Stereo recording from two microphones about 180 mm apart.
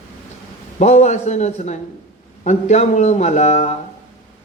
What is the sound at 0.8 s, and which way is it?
Speech, 40° left (ahead or behind).